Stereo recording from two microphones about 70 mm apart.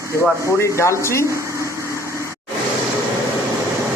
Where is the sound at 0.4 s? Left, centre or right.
Left.